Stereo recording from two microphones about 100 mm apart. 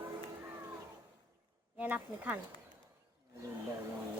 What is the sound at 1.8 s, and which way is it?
Speech, 20° right (ahead or behind).